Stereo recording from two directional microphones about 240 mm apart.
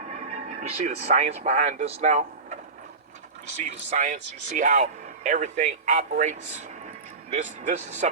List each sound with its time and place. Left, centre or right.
0.0 s speech: right
3.7 s speech: right